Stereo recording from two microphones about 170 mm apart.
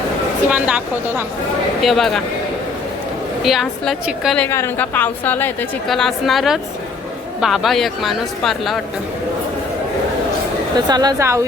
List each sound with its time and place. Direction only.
0.5 s a woman's voice: 10° right (ahead or behind)
3.4 s speech: centre (ahead or behind)
4.4 s a woman's voice: 15° left (ahead or behind)
5.9 s speech: centre (ahead or behind)
10.8 s speech: 25° right (ahead or behind)